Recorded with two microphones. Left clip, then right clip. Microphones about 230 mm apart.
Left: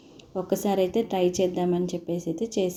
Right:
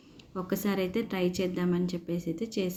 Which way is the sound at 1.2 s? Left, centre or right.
Centre.